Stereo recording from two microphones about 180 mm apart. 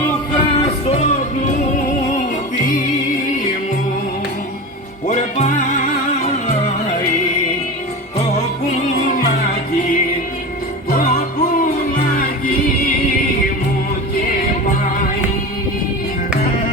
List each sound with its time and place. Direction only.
0.3 s music: 35° left (ahead or behind)
5.0 s music: 45° left (ahead or behind)
8.2 s music: 40° left (ahead or behind)
11.5 s music: 50° left (ahead or behind)